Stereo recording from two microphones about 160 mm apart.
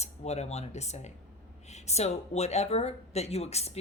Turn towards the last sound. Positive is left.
turn(degrees=40)  # may be behind; listen again after turning